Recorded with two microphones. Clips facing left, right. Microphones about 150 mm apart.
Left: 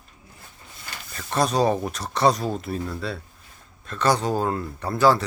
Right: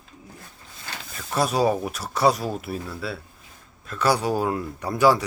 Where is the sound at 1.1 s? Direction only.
5° right (ahead or behind).